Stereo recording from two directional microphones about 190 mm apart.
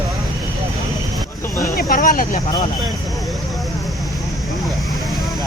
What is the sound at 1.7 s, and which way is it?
Speech, 50° left (ahead or behind).